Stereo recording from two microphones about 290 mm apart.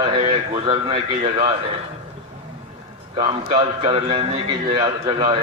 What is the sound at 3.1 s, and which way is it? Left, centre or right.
A man's voice, centre.